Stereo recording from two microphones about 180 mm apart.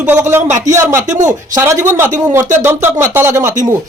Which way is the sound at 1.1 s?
45° right (ahead or behind).